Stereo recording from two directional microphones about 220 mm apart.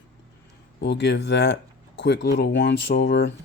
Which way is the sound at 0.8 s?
50° left (ahead or behind).